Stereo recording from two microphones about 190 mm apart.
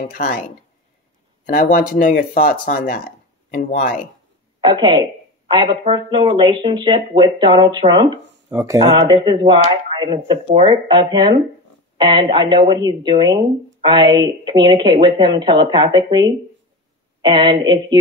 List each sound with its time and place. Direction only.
0.1 s speech: 55° left (ahead or behind)
1.4 s speech: 45° left (ahead or behind)
4.6 s speech: 25° right (ahead or behind)